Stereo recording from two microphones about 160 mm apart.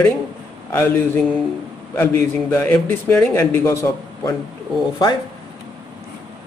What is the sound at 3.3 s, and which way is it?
Speech, 20° left (ahead or behind).